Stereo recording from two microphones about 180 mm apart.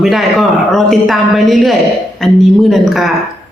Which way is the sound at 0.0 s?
Centre (ahead or behind).